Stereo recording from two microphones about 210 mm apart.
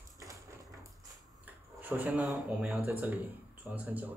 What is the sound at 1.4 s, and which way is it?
Speech, 10° right (ahead or behind).